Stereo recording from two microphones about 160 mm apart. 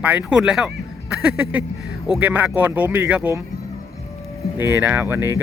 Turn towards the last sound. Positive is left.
turn(degrees=-15)  # may be behind; listen again after turning